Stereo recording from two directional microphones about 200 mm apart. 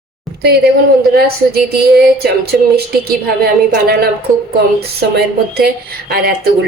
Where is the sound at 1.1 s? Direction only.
50° right (ahead or behind).